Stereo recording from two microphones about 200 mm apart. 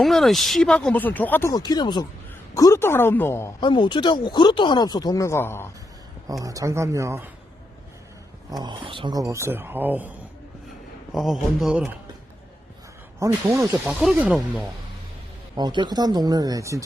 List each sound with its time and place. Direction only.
0.0 s speech: centre (ahead or behind)
3.6 s speech: 25° left (ahead or behind)
6.2 s speech: 15° right (ahead or behind)
8.4 s speech: 20° right (ahead or behind)
11.1 s a man's voice: centre (ahead or behind)
13.1 s a man's voice: 15° right (ahead or behind)
15.5 s speech: 20° right (ahead or behind)